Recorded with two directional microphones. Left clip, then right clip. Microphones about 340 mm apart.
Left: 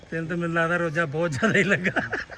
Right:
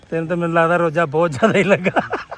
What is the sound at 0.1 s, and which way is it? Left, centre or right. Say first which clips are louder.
A man's voice: right 9 dB; centre.